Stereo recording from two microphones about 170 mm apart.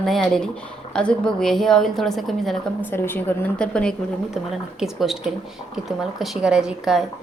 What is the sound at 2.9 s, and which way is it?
A woman's voice, 10° left (ahead or behind).